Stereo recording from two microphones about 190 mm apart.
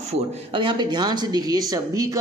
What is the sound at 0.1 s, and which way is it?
Speech, 25° right (ahead or behind).